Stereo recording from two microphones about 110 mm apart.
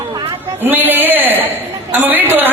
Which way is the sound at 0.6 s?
15° right (ahead or behind).